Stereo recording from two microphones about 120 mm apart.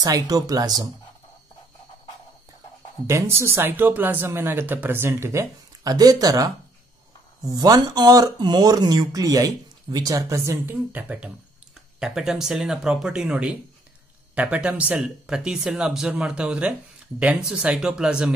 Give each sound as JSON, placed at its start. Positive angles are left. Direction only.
{"t": 0.0, "sound": "speech", "side_deg": -30}
{"t": 3.1, "sound": "speech", "side_deg": -20}